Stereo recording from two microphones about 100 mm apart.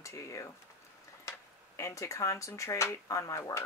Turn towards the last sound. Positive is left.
turn(degrees=30)  # may be behind; listen again after turning